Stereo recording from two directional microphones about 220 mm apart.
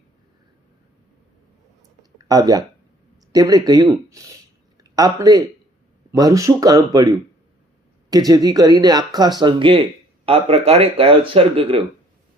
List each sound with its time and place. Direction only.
2.1 s speech: 15° right (ahead or behind)
8.1 s speech: 15° right (ahead or behind)